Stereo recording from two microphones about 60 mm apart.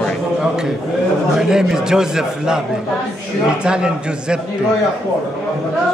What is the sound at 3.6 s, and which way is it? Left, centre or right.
Speech, centre.